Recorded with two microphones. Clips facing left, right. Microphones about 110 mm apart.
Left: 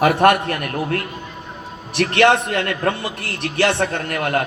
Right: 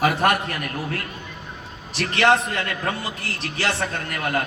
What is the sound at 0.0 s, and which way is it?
Speech, 60° left (ahead or behind).